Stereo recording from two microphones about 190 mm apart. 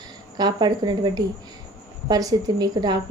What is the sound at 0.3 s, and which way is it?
A woman's voice, 20° right (ahead or behind).